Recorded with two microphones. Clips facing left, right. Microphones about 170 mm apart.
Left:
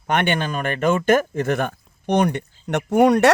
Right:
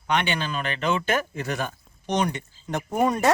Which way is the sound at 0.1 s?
50° left (ahead or behind).